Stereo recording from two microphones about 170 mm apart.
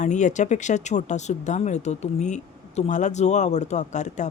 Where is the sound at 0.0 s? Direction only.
45° left (ahead or behind).